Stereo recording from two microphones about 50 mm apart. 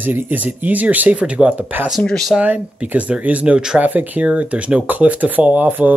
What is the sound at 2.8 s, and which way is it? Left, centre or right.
Speech, right.